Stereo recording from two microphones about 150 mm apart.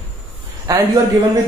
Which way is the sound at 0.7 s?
20° right (ahead or behind).